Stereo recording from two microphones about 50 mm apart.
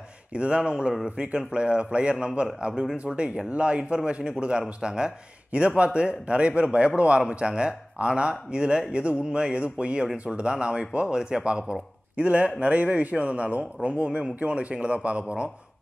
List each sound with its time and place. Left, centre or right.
0.3 s speech: right
3.2 s speech: right
12.2 s speech: right